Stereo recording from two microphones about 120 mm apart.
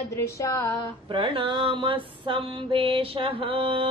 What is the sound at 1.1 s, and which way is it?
Mantra, 45° right (ahead or behind).